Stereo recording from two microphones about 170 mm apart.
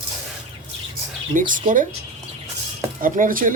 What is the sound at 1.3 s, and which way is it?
Speech, 50° right (ahead or behind).